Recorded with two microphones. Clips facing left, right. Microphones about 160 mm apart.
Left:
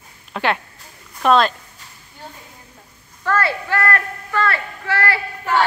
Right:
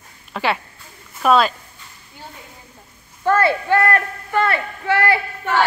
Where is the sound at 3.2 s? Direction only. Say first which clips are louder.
Right 4 dB; 25° right (ahead or behind).